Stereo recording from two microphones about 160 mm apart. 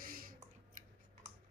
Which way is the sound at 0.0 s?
60° right (ahead or behind).